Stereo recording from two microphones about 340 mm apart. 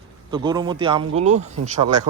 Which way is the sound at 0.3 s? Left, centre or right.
Centre.